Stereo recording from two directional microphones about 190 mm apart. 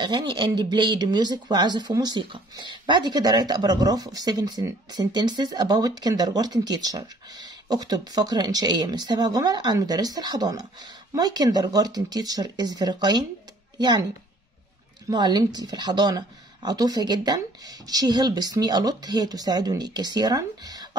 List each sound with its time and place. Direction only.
0.0 s speech: 25° right (ahead or behind)
15.0 s speech: 20° right (ahead or behind)